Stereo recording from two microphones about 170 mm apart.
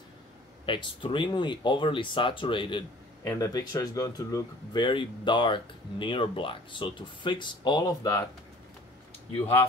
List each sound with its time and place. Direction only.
0.7 s speech: 30° left (ahead or behind)